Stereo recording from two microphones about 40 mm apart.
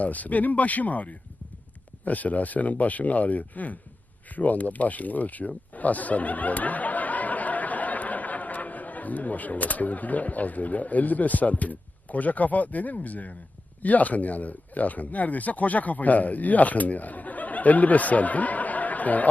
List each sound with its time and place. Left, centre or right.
0.0 s speech: left